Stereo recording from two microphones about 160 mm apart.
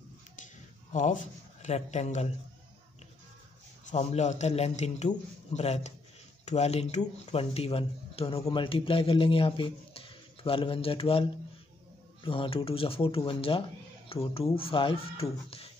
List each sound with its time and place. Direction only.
0.9 s a man's voice: 50° left (ahead or behind)
3.9 s a man's voice: 45° left (ahead or behind)